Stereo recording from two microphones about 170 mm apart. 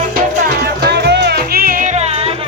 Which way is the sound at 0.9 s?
80° right.